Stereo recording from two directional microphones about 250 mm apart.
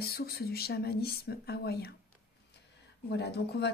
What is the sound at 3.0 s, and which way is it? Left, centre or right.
Speech, left.